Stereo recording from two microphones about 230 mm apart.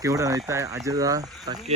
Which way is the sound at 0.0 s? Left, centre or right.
Centre.